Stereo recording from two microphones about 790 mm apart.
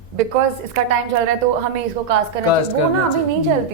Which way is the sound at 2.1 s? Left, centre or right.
Right.